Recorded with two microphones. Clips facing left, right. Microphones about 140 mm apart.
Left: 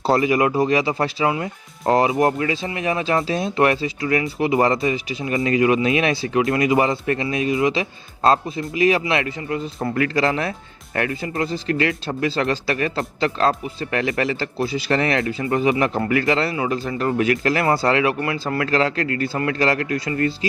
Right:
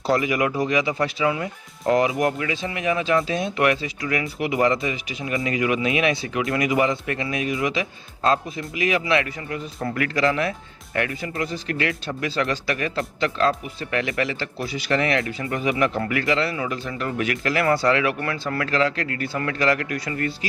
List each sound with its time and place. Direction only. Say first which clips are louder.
0.0 s speech: left 4 dB; 30° left (ahead or behind)